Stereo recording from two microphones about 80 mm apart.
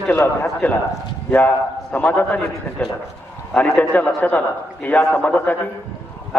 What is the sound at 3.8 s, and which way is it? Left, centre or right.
A man's voice, left.